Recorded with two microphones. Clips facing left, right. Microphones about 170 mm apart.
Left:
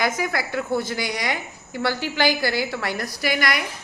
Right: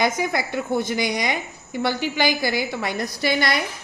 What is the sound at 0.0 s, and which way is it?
A woman's voice, 20° right (ahead or behind).